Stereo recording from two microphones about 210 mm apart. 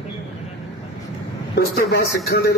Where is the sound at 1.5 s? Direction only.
50° left (ahead or behind).